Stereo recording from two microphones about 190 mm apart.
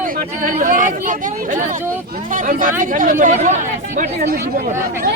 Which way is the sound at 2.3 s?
45° right (ahead or behind).